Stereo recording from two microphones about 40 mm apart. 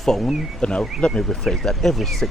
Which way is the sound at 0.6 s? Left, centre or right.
Left.